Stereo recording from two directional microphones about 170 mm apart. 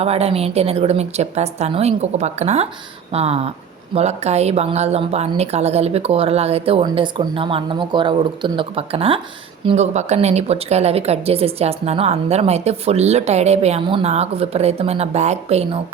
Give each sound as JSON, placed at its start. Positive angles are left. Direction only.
{"t": 0.0, "sound": "a woman's voice", "side_deg": -35}